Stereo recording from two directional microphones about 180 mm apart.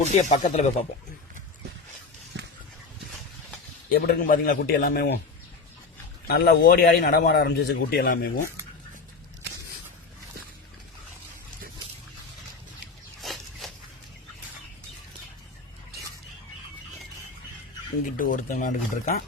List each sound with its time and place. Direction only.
0.0 s speech: 40° left (ahead or behind)
2.3 s a sound: 80° right
3.8 s a man's voice: 60° left (ahead or behind)
6.2 s a man's voice: 60° left (ahead or behind)
13.2 s a sound: centre (ahead or behind)
18.2 s speech: 45° left (ahead or behind)